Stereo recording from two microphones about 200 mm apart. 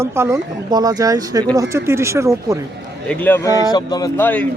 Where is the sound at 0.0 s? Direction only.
15° right (ahead or behind).